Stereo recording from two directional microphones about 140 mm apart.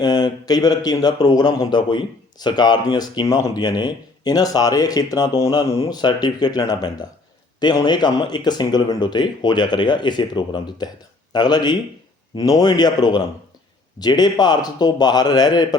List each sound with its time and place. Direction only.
0.0 s speech: 30° left (ahead or behind)